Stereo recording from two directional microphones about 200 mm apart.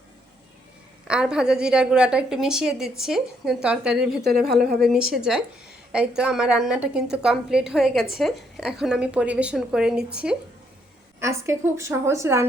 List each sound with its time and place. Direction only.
1.0 s a woman's voice: 5° right (ahead or behind)
4.2 s a woman's voice: 50° right (ahead or behind)
4.5 s a woman's voice: centre (ahead or behind)